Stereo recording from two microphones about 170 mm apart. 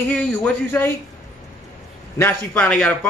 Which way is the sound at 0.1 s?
5° left (ahead or behind).